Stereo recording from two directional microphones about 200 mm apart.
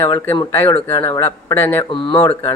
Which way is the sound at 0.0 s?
10° left (ahead or behind).